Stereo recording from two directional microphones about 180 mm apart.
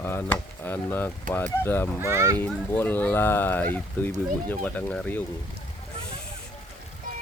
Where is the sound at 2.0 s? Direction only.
15° right (ahead or behind).